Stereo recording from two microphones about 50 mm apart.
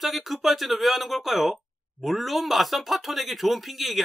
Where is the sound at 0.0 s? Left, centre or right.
Centre.